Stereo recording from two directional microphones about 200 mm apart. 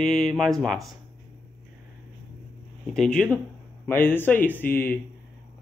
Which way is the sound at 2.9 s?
5° left (ahead or behind).